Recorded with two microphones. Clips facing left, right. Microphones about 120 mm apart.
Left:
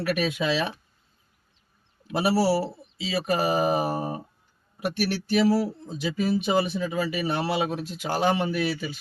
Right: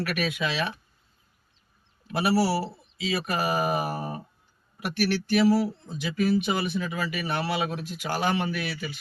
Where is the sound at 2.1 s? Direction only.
30° left (ahead or behind).